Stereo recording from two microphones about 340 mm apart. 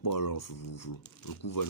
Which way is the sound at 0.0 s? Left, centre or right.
Left.